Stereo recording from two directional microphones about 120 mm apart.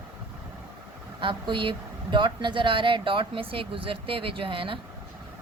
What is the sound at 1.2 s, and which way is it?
Speech, 40° right (ahead or behind).